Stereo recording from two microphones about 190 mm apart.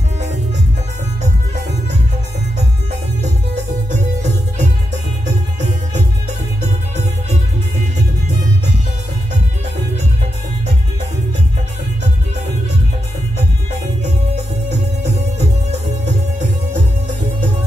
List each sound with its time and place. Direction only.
1.2 s music: 40° right (ahead or behind)
3.9 s music: 40° right (ahead or behind)
14.3 s music: 35° right (ahead or behind)